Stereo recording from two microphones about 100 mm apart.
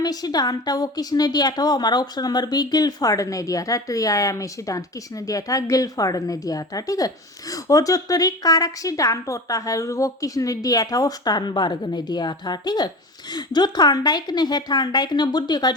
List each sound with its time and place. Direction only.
0.0 s a woman's voice: 40° left (ahead or behind)